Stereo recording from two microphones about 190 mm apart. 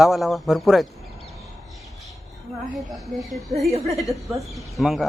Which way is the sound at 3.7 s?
35° right (ahead or behind).